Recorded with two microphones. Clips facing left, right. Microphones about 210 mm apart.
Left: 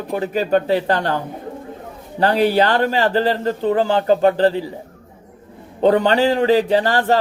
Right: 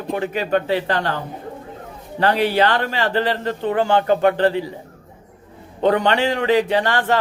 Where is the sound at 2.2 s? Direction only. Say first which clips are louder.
Left 2 dB; 40° left (ahead or behind).